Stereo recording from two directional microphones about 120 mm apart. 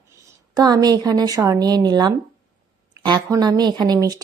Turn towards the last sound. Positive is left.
turn(degrees=-30)  # may be behind; listen again after turning